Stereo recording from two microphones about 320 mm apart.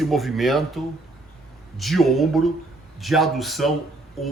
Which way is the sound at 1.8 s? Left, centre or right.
Centre.